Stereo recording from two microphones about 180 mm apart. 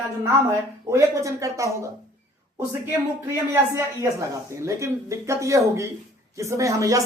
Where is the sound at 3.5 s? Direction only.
15° right (ahead or behind).